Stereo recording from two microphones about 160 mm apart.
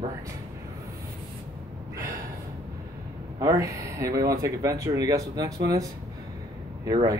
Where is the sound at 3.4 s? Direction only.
20° right (ahead or behind).